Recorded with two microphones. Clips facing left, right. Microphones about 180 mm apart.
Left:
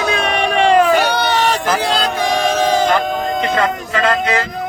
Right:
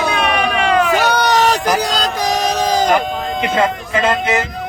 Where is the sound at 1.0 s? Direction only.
40° right (ahead or behind).